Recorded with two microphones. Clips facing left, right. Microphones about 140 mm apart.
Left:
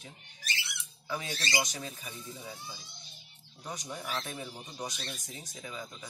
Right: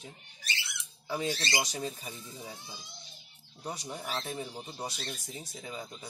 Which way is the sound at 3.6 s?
30° right (ahead or behind).